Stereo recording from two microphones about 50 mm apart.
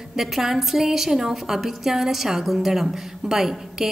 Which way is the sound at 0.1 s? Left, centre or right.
Centre.